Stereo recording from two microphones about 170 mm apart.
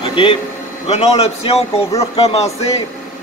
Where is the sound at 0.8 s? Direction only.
35° left (ahead or behind).